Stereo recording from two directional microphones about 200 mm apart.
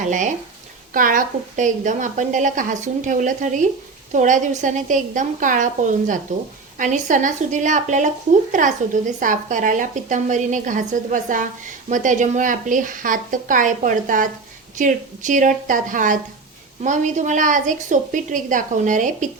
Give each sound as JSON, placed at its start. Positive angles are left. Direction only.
{"t": 0.0, "sound": "a woman's voice", "side_deg": -40}